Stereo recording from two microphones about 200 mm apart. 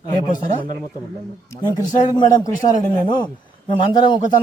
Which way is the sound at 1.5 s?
20° left (ahead or behind).